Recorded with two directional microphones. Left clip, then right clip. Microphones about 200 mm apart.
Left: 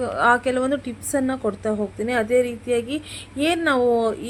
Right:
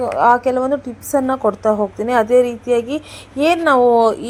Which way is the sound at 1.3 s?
Centre (ahead or behind).